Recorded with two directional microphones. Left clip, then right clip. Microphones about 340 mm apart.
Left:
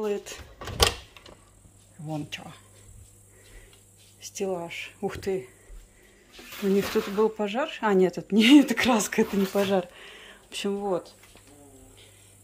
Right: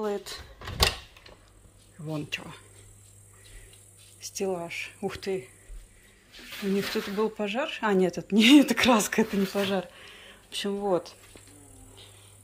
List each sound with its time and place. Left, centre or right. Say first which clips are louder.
0.0 s speech: left 1 dB; centre
2.0 s speech: right 1 dB; centre
4.2 s speech: even; centre
6.9 s speech: left 4 dB; centre